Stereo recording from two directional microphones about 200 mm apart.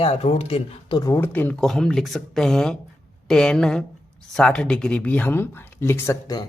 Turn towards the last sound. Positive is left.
turn(degrees=15)  # may be behind; listen again after turning